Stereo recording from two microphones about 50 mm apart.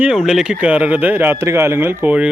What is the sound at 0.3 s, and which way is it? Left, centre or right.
Speech, centre.